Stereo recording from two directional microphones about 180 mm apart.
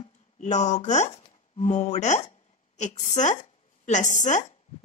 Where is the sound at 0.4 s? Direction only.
40° left (ahead or behind).